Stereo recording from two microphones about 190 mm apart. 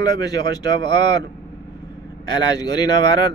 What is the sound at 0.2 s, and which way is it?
Speech, 20° left (ahead or behind).